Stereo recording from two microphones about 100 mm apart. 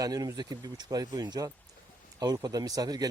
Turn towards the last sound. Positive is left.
turn(degrees=-40)  # may be behind; listen again after turning